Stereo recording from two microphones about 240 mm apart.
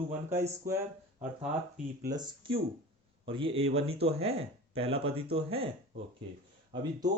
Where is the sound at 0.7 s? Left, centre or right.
Right.